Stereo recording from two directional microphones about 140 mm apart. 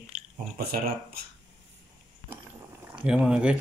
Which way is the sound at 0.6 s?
90° right.